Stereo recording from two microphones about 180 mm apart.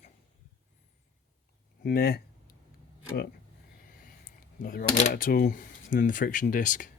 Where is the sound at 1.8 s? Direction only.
55° left (ahead or behind).